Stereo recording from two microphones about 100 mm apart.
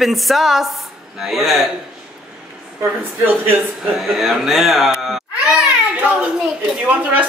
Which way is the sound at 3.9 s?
Centre (ahead or behind).